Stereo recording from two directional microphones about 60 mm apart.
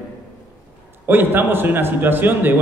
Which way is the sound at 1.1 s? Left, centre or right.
Right.